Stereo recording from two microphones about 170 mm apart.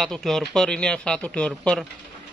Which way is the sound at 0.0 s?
Centre (ahead or behind).